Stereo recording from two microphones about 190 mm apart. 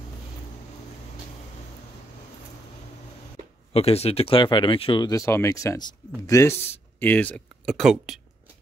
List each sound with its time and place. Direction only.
3.7 s speech: 30° left (ahead or behind); by 8.2 s centre (ahead or behind)